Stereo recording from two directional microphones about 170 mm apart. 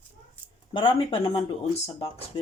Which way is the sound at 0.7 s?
30° left (ahead or behind).